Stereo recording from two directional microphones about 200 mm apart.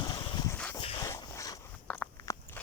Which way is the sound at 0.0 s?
20° left (ahead or behind).